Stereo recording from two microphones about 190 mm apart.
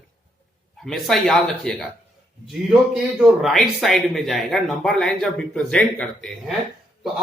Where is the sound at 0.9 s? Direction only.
Centre (ahead or behind).